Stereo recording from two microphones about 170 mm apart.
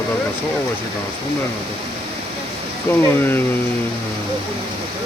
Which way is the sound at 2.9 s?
15° left (ahead or behind).